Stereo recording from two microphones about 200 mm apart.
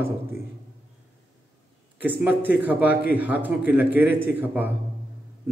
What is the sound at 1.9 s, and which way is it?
A man's voice, 10° right (ahead or behind).